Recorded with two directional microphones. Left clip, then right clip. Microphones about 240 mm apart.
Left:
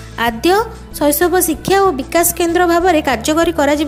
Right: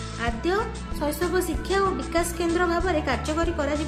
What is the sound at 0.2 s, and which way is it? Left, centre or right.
A woman's voice, left.